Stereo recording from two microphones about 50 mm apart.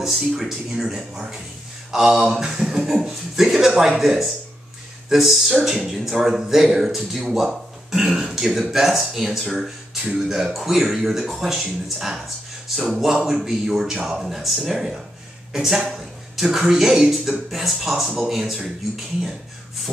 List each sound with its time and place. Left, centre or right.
0.0 s speech: centre
12.6 s speech: centre